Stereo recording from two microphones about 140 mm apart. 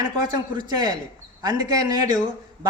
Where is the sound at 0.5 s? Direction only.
30° right (ahead or behind).